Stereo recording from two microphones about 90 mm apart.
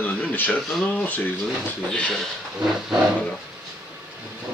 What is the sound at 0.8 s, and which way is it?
Speech, 15° left (ahead or behind).